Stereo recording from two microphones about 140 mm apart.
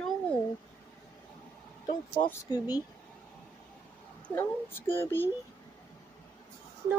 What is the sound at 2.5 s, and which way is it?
Speech, 25° left (ahead or behind).